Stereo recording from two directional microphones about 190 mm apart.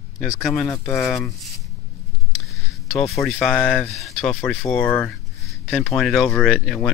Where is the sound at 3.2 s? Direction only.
Centre (ahead or behind).